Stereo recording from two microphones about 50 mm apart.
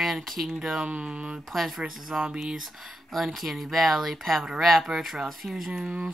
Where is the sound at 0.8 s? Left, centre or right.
Right.